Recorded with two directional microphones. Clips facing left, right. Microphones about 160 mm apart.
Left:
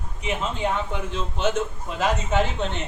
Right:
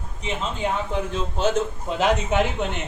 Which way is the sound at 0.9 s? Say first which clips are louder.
Right 3 dB; 35° right (ahead or behind).